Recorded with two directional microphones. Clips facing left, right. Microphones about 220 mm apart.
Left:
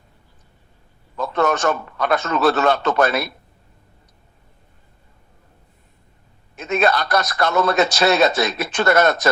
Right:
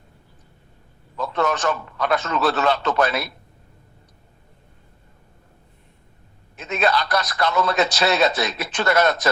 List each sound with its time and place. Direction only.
1.1 s a man's voice: 50° left (ahead or behind)
6.6 s a man's voice: 45° left (ahead or behind)